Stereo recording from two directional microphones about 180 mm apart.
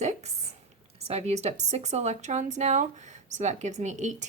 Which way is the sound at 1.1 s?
35° right (ahead or behind).